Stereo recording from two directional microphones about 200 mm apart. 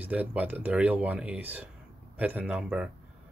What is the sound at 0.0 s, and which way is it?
Speech, 5° right (ahead or behind).